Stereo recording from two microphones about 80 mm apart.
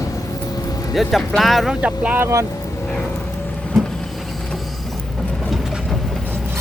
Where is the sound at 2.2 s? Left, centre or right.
Right.